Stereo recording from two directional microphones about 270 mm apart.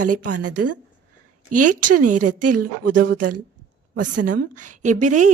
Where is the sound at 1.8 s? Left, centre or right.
Right.